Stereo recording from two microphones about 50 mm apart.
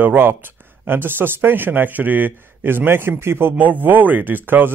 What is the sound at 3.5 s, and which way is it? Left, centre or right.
A man's voice, right.